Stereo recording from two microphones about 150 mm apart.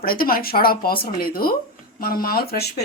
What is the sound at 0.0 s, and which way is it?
Speech, 80° left.